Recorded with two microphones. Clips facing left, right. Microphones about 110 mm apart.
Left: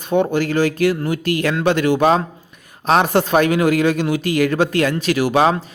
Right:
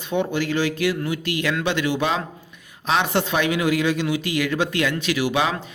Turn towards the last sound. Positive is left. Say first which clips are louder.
# left 6 dB
turn(degrees=40)  # may be behind; listen again after turning